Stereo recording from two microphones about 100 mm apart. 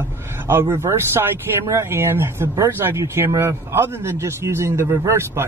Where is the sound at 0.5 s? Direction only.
25° right (ahead or behind).